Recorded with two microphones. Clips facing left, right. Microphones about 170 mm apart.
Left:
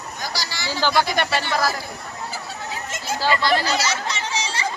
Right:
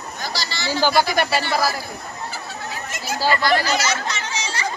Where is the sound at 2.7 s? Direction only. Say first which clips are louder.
Left 1 dB; 25° left (ahead or behind).